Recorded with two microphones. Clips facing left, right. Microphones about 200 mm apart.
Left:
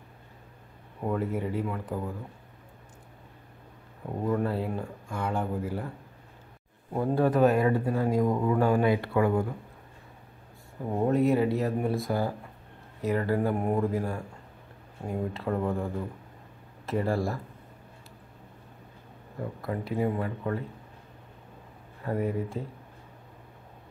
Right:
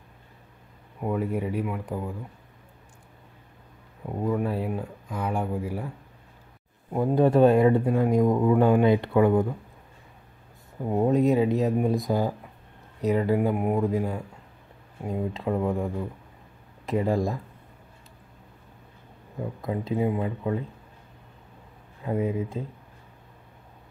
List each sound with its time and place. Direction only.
1.0 s speech: 15° right (ahead or behind)
4.2 s speech: 10° right (ahead or behind)
6.9 s speech: 15° right (ahead or behind)
7.2 s speech: 25° right (ahead or behind)
10.9 s speech: 15° right (ahead or behind)
15.3 s speech: 15° right (ahead or behind)
19.6 s speech: 20° right (ahead or behind)
22.0 s speech: 15° right (ahead or behind)